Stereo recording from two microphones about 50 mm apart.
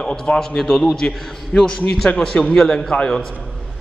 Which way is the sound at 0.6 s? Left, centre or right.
Centre.